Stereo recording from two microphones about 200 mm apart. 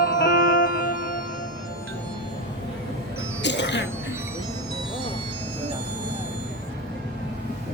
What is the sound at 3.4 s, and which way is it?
Music, 60° left (ahead or behind).